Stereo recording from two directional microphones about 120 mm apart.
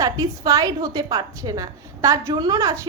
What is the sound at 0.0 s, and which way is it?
Speech, 30° right (ahead or behind).